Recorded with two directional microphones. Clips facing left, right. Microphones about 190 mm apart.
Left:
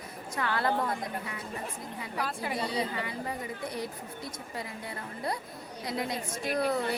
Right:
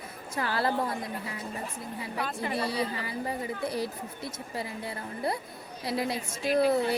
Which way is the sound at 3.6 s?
30° right (ahead or behind).